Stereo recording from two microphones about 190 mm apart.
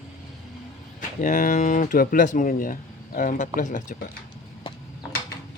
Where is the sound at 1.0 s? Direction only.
40° left (ahead or behind).